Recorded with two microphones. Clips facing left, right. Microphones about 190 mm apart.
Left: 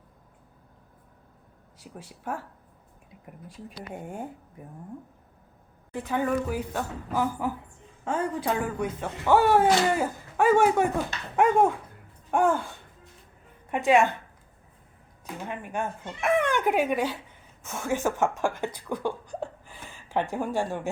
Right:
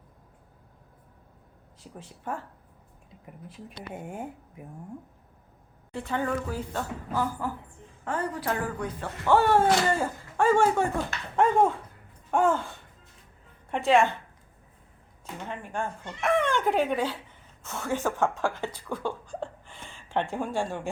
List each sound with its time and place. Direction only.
1.8 s speech: 10° left (ahead or behind)
6.0 s a woman's voice: 5° left (ahead or behind)
15.4 s speech: 15° left (ahead or behind)
19.6 s a sound: 5° left (ahead or behind)
20.2 s speech: 15° left (ahead or behind)